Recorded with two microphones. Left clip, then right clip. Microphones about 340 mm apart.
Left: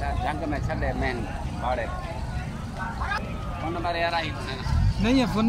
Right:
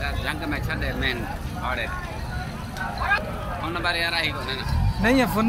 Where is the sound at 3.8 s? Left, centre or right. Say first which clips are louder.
Right 2 dB; left.